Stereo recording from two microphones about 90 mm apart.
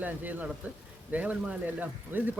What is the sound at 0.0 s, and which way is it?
Speech, 20° right (ahead or behind).